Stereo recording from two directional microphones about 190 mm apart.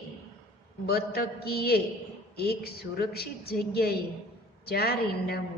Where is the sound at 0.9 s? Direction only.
55° left (ahead or behind).